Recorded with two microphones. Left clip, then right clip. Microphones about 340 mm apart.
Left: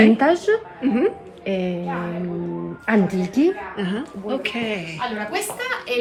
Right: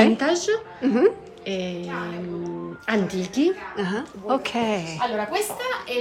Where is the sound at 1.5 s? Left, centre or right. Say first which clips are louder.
Left 4 dB; centre.